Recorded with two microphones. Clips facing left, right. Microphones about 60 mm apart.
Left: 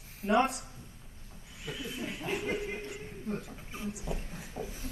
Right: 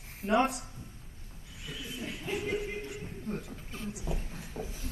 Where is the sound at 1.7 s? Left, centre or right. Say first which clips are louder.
Left 2 dB; centre.